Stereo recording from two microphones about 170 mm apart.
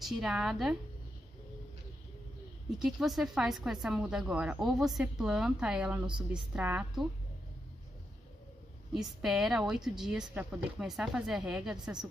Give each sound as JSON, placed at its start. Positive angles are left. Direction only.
{"t": 0.0, "sound": "speech", "side_deg": -5}
{"t": 2.8, "sound": "speech", "side_deg": 0}
{"t": 6.0, "sound": "a woman's voice", "side_deg": -30}
{"t": 6.5, "sound": "a woman's voice", "side_deg": -10}
{"t": 8.9, "sound": "speech", "side_deg": 0}